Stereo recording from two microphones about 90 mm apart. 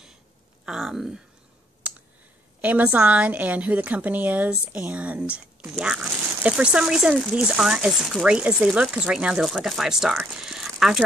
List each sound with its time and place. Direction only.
0.7 s speech: 5° right (ahead or behind)
1.8 s clicking: 15° right (ahead or behind)
2.6 s a woman's voice: 15° right (ahead or behind)